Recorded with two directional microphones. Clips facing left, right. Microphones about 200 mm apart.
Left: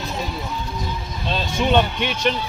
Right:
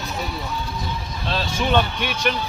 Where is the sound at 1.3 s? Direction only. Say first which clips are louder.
Left 2 dB; 20° left (ahead or behind).